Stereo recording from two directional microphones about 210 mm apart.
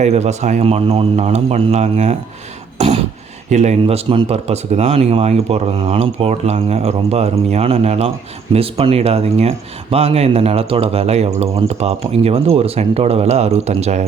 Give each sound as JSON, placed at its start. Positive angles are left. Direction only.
{"t": 0.0, "sound": "speech", "side_deg": -30}
{"t": 2.7, "sound": "throat clearing", "side_deg": -30}
{"t": 3.5, "sound": "speech", "side_deg": -35}